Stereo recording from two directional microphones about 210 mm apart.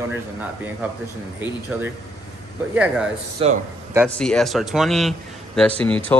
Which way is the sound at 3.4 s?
30° right (ahead or behind).